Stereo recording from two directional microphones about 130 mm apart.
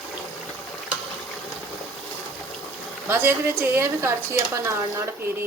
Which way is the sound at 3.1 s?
20° right (ahead or behind).